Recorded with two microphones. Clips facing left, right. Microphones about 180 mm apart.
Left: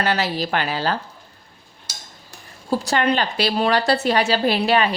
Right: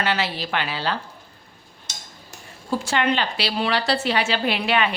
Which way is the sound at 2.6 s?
35° left (ahead or behind).